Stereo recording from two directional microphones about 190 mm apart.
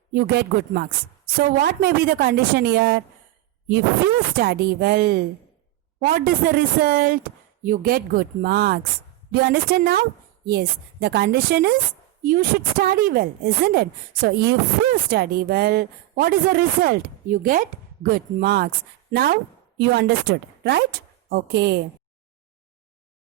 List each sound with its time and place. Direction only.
0.1 s a woman's voice: 55° right (ahead or behind)
4.4 s a woman's voice: 55° right (ahead or behind)